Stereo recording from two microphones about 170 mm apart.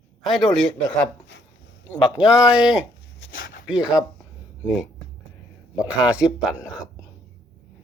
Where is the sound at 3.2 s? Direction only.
90° left.